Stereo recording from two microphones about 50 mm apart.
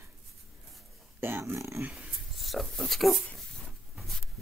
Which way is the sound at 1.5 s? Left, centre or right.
Right.